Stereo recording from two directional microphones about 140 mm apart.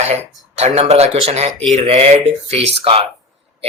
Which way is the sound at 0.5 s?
50° right (ahead or behind).